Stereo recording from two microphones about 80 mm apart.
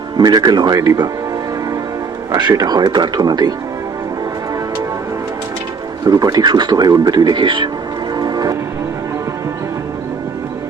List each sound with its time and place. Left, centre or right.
0.2 s speech: right
2.3 s speech: right
3.2 s speech: right
6.1 s speech: right
8.1 s train: right